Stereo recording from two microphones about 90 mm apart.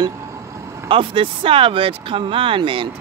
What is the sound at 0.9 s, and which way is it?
Speech, 75° right (ahead or behind).